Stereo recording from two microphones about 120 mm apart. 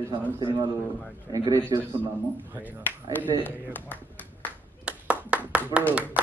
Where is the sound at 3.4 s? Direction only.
15° left (ahead or behind).